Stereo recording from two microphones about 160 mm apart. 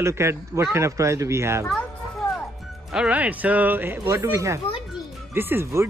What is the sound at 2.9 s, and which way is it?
A child's voice, 5° right (ahead or behind).